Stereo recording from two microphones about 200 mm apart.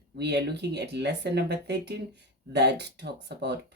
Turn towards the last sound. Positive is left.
turn(degrees=-60)  # may be behind; listen again after turning